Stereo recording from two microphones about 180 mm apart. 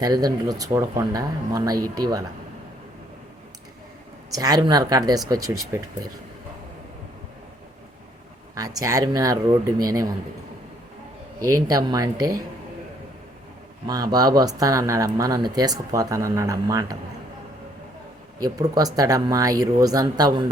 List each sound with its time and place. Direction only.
0.0 s speech: 20° right (ahead or behind)
4.4 s speech: 20° right (ahead or behind)
8.5 s speech: 20° right (ahead or behind)
11.3 s speech: 20° right (ahead or behind)
13.8 s speech: 20° right (ahead or behind)
18.3 s speech: 20° right (ahead or behind)